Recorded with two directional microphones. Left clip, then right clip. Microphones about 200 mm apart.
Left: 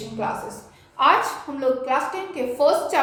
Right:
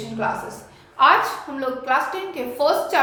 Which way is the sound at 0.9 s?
25° left (ahead or behind).